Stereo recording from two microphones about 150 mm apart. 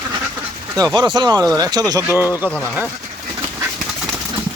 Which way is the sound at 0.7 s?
25° right (ahead or behind).